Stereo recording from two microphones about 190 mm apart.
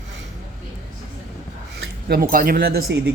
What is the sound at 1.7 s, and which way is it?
Speech, 55° right (ahead or behind).